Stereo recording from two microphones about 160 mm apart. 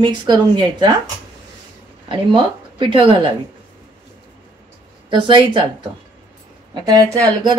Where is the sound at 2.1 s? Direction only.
30° right (ahead or behind).